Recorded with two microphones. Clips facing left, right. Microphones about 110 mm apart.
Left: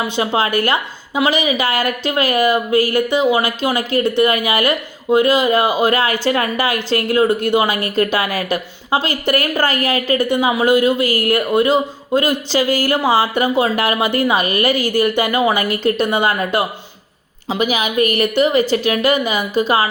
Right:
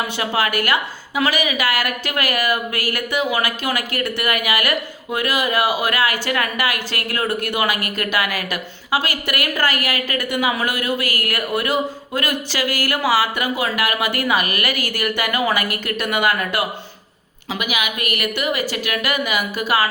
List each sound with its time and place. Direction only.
0.2 s a woman's voice: 25° left (ahead or behind)